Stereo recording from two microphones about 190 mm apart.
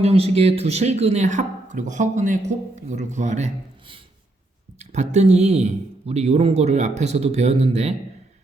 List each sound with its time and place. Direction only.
0.0 s speech: 30° right (ahead or behind)